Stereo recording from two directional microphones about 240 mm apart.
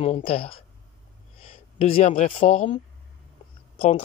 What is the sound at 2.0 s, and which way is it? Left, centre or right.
Speech, left.